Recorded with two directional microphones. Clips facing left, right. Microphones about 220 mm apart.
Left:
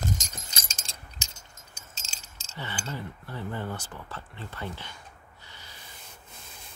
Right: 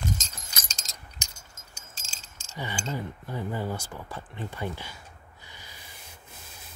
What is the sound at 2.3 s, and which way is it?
Speech, 15° right (ahead or behind).